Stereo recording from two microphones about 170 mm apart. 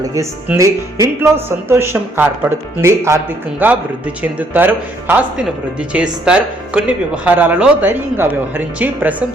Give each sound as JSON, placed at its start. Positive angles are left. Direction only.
{"t": 0.1, "sound": "speech", "side_deg": -15}